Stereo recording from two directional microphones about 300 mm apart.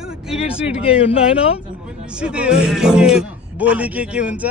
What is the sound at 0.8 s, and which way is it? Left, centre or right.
Speech, centre.